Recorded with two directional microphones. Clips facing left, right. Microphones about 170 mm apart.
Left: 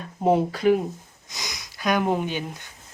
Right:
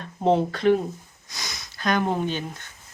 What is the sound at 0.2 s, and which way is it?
Speech, 10° left (ahead or behind).